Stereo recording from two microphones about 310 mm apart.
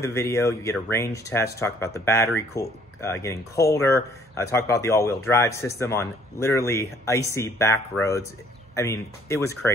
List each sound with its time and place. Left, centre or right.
0.0 s speech: centre